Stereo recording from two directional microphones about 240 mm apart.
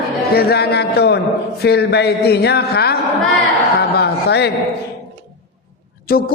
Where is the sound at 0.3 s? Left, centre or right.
Left.